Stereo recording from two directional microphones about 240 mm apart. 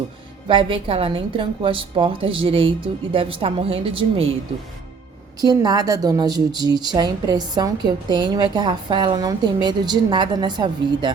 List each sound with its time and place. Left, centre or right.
0.4 s a woman's voice: right
5.4 s a woman's voice: centre